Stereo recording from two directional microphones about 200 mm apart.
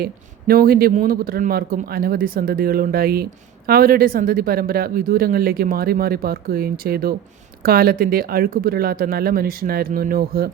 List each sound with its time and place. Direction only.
0.0 s speech: 50° right (ahead or behind)